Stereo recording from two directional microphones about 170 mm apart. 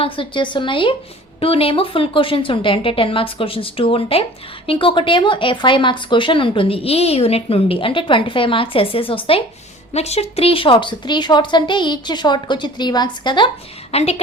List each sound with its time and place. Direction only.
0.0 s a woman's voice: 30° left (ahead or behind)